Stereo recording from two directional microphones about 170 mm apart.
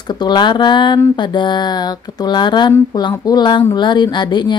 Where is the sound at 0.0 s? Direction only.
25° left (ahead or behind).